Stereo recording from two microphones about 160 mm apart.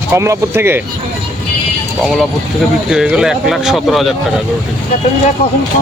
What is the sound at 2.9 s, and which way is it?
Speech, 5° right (ahead or behind).